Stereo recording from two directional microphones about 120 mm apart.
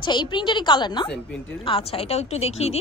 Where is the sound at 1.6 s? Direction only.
50° left (ahead or behind).